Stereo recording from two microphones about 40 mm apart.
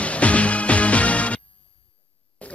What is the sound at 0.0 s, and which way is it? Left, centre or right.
Music, left.